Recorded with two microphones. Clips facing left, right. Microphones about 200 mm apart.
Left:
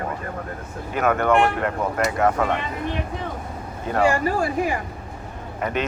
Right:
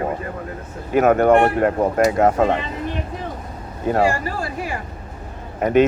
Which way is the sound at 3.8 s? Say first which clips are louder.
Right 3 dB; 45° right (ahead or behind).